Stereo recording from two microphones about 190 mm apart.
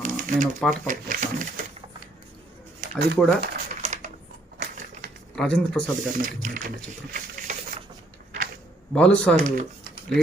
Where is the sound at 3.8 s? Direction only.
40° right (ahead or behind).